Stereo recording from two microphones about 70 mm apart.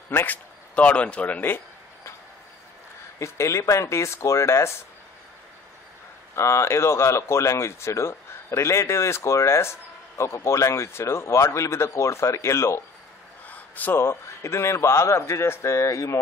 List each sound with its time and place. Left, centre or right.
0.1 s speech: left
3.2 s speech: left
6.3 s speech: left
13.5 s a sound: left
13.9 s speech: left